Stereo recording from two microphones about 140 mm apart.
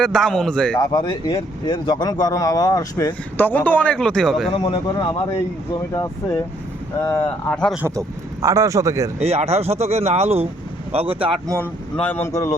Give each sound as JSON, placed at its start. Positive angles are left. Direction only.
{"t": 0.0, "sound": "a man's voice", "side_deg": 5}
{"t": 0.8, "sound": "speech", "side_deg": 30}
{"t": 3.3, "sound": "speech", "side_deg": 15}
{"t": 4.5, "sound": "speech", "side_deg": 35}
{"t": 5.9, "sound": "speech", "side_deg": 20}
{"t": 7.5, "sound": "speech", "side_deg": 5}
{"t": 7.8, "sound": "speech", "side_deg": -20}
{"t": 9.1, "sound": "speech", "side_deg": -50}
{"t": 11.6, "sound": "speech", "side_deg": 10}